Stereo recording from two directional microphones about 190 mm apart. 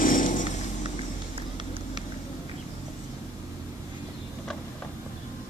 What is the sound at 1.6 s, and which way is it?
Vehicle, 25° right (ahead or behind).